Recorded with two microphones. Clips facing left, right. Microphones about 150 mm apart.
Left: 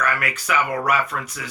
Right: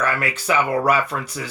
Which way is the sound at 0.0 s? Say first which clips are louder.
Right 2 dB; 30° right (ahead or behind).